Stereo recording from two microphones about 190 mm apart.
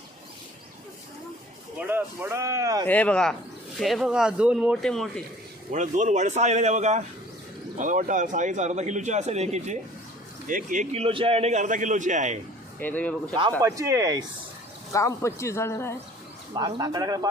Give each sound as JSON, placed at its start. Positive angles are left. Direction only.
{"t": 1.9, "sound": "a sound", "side_deg": -10}
{"t": 2.8, "sound": "a man's voice", "side_deg": 10}
{"t": 5.7, "sound": "a man's voice", "side_deg": -40}
{"t": 12.8, "sound": "speech", "side_deg": 10}
{"t": 13.6, "sound": "speech", "side_deg": -15}
{"t": 14.9, "sound": "speech", "side_deg": 15}
{"t": 16.6, "sound": "speech", "side_deg": -20}